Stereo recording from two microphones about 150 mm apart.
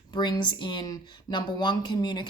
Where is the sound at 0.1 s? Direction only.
30° left (ahead or behind).